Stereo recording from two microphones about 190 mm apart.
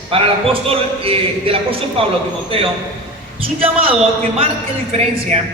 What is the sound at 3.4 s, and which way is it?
Speech, 30° right (ahead or behind).